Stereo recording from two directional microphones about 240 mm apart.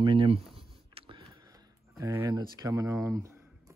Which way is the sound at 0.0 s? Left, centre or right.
Right.